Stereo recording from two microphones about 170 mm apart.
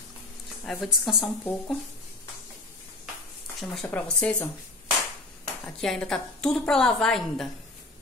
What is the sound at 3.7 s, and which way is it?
Speech, 5° left (ahead or behind).